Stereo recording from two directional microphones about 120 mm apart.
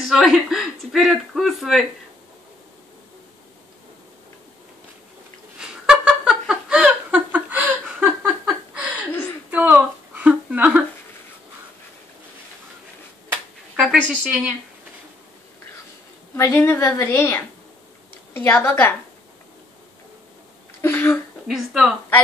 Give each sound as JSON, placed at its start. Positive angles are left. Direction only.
{"t": 0.1, "sound": "speech", "side_deg": -5}
{"t": 5.6, "sound": "a sound", "side_deg": -5}
{"t": 14.0, "sound": "a woman's voice", "side_deg": -10}
{"t": 16.3, "sound": "a woman's voice", "side_deg": 20}
{"t": 20.8, "sound": "a sound", "side_deg": 20}
{"t": 21.5, "sound": "speech", "side_deg": 0}